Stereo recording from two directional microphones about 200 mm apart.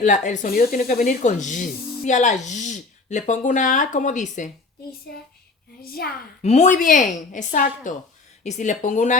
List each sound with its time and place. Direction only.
0.0 s a woman's voice: 40° left (ahead or behind)
6.4 s speech: 35° left (ahead or behind)